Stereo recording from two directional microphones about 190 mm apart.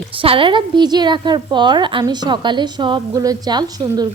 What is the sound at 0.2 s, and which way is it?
A woman's voice, 25° right (ahead or behind).